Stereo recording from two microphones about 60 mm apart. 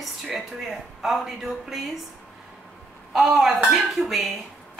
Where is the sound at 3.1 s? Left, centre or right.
Centre.